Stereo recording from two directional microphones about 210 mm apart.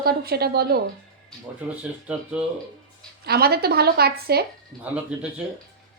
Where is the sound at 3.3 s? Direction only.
50° right (ahead or behind).